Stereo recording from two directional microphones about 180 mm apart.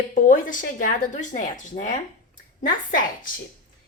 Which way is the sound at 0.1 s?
45° left (ahead or behind).